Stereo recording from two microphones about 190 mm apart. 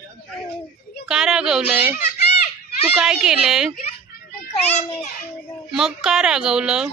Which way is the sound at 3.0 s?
5° right (ahead or behind).